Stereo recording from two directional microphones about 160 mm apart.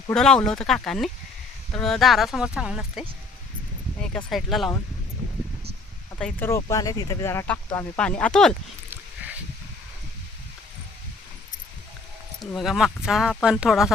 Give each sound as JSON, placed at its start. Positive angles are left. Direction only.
{"t": 0.1, "sound": "speech", "side_deg": 5}
{"t": 4.3, "sound": "speech", "side_deg": 0}
{"t": 6.1, "sound": "speech", "side_deg": 5}
{"t": 6.6, "sound": "speech", "side_deg": 20}
{"t": 8.9, "sound": "a sound", "side_deg": -10}
{"t": 12.4, "sound": "speech", "side_deg": 0}